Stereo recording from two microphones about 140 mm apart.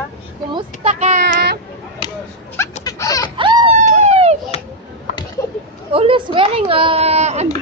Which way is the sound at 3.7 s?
50° right (ahead or behind).